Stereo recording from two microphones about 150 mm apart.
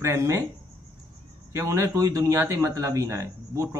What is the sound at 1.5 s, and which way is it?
A man's voice, 20° right (ahead or behind).